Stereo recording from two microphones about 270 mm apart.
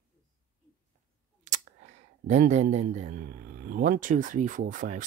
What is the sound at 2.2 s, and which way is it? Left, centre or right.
Speech, right.